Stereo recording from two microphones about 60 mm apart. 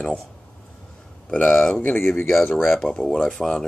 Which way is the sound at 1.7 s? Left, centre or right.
Left.